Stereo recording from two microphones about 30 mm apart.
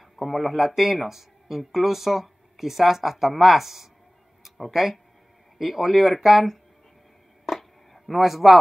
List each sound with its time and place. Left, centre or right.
0.2 s speech: centre
5.6 s speech: centre
7.4 s a sound: centre
8.2 s speech: centre